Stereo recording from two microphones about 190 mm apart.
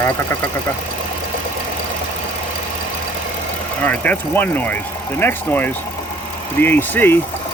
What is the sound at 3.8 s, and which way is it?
Speech, 10° left (ahead or behind).